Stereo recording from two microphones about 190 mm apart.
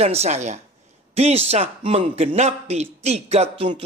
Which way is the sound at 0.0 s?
35° right (ahead or behind).